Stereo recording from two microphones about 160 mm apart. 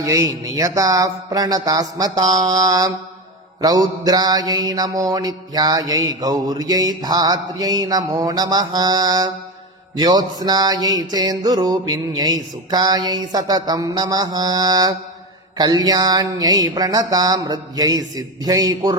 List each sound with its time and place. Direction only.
0.0 s mantra: 20° right (ahead or behind)